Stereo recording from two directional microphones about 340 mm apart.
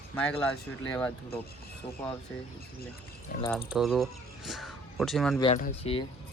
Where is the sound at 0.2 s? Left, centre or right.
Centre.